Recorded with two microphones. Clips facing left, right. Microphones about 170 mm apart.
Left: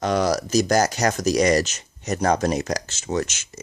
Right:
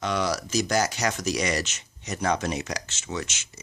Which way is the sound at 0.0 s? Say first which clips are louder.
Left 6 dB; 40° left (ahead or behind).